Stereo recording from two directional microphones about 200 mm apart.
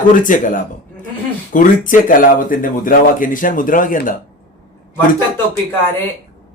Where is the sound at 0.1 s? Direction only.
40° left (ahead or behind).